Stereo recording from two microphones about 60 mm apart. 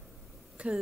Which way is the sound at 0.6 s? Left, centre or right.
Centre.